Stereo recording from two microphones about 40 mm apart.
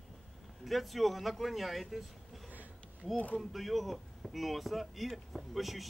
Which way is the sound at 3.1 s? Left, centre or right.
Left.